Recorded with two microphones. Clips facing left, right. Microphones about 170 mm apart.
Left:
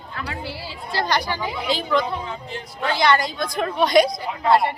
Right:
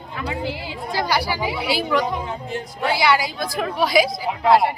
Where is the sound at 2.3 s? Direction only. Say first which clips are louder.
Right 4 dB; 50° right (ahead or behind).